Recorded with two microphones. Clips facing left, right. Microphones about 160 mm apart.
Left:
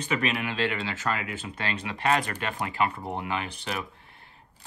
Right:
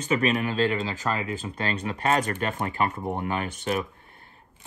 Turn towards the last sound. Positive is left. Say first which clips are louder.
# right 6 dB
turn(degrees=-45)  # may be behind; listen again after turning